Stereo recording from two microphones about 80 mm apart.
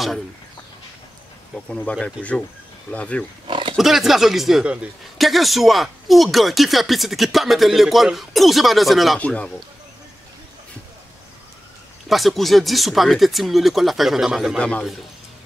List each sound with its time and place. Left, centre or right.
1.7 s speech: centre
3.4 s pig: right
3.7 s speech: centre
9.2 s speech: centre
12.1 s speech: centre